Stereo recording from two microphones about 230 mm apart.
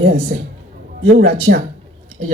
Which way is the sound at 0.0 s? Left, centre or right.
Right.